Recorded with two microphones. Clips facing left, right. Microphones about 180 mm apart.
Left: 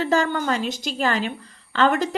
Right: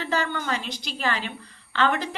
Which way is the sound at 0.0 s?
45° left (ahead or behind).